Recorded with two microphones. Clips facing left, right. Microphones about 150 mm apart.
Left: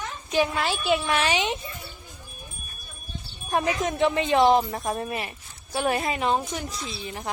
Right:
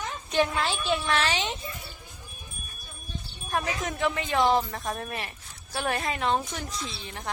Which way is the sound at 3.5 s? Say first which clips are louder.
Left 5 dB; 20° left (ahead or behind).